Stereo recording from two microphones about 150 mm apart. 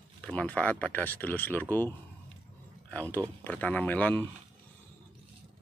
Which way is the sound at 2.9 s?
10° left (ahead or behind).